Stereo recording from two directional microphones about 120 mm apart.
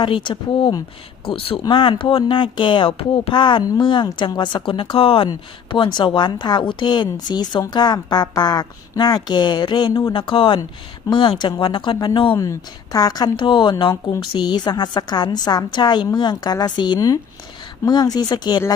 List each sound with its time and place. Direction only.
0.0 s speech: 45° left (ahead or behind)
10.1 s speech: 45° left (ahead or behind)
12.4 s speech: 25° left (ahead or behind)